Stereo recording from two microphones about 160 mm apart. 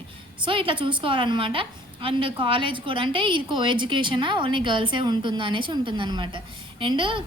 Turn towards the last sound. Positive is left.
turn(degrees=-30)  # may be behind; listen again after turning